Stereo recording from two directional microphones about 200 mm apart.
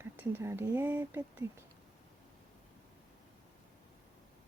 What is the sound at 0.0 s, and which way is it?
Speech, 10° right (ahead or behind).